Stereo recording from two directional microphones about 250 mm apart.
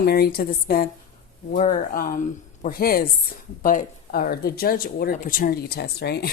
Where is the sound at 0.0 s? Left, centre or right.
Left.